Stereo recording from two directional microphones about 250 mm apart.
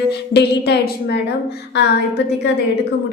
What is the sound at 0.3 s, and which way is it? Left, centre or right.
A woman's voice, left.